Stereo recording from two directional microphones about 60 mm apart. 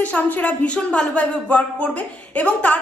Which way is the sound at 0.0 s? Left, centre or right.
Left.